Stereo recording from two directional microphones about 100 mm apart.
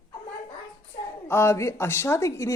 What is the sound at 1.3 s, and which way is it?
Speech, 25° left (ahead or behind).